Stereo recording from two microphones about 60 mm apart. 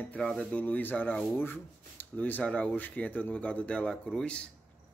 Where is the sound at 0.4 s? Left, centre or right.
Left.